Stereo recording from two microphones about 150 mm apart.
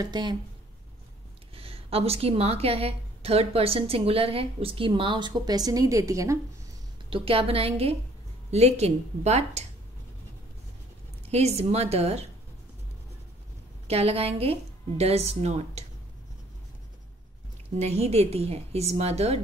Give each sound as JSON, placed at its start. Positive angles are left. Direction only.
{"t": 0.0, "sound": "speech", "side_deg": -30}
{"t": 1.5, "sound": "a woman's voice", "side_deg": -40}
{"t": 7.1, "sound": "a woman's voice", "side_deg": -35}
{"t": 11.2, "sound": "a woman's voice", "side_deg": -45}
{"t": 13.8, "sound": "a woman's voice", "side_deg": -40}
{"t": 17.7, "sound": "a woman's voice", "side_deg": -45}